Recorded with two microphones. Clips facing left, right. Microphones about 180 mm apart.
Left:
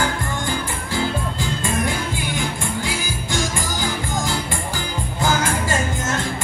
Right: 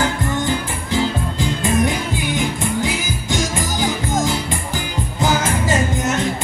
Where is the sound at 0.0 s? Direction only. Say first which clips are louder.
Right 4 dB; 20° right (ahead or behind).